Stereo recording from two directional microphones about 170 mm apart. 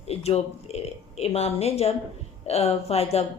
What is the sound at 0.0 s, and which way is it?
Speech, 35° left (ahead or behind).